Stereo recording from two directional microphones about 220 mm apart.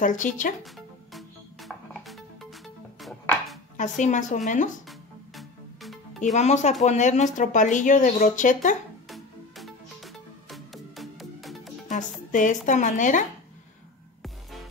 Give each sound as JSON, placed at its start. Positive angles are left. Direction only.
{"t": 0.0, "sound": "speech", "side_deg": 35}
{"t": 0.7, "sound": "music", "side_deg": 0}
{"t": 3.7, "sound": "speech", "side_deg": 35}
{"t": 4.8, "sound": "music", "side_deg": 0}
{"t": 6.3, "sound": "speech", "side_deg": 30}
{"t": 9.1, "sound": "music", "side_deg": 0}
{"t": 11.9, "sound": "speech", "side_deg": 35}
{"t": 14.2, "sound": "music", "side_deg": 0}